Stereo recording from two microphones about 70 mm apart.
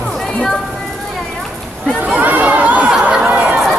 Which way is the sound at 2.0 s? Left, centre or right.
Right.